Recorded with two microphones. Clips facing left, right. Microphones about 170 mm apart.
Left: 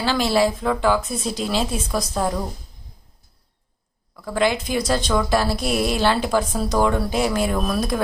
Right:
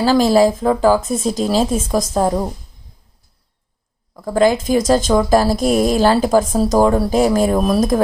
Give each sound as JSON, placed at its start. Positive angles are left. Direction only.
{"t": 0.0, "sound": "speech", "side_deg": -40}
{"t": 4.1, "sound": "speech", "side_deg": -40}